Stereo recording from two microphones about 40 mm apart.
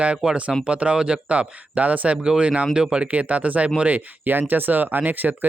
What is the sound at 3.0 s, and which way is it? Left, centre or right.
Speech, right.